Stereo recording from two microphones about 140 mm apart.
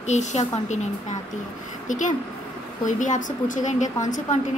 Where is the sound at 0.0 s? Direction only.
55° left (ahead or behind).